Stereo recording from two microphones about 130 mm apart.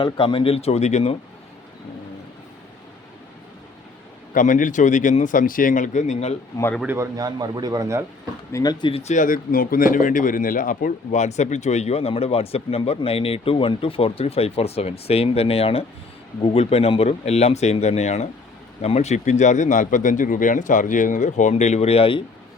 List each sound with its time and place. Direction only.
0.0 s speech: 40° left (ahead or behind); by 1.1 s 60° left (ahead or behind)
4.4 s speech: 80° left; by 6.3 s 60° left (ahead or behind)
6.8 s a man's voice: 20° right (ahead or behind)
8.5 s speech: 30° left (ahead or behind)
8.9 s speech: 50° left (ahead or behind)
9.1 s speech: 90° left; by 22.2 s 45° left (ahead or behind)